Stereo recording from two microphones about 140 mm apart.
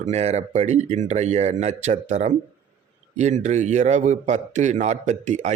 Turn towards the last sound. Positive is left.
turn(degrees=-60)  # may be behind; listen again after turning